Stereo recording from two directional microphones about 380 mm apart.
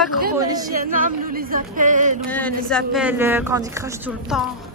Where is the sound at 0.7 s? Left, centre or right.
Right.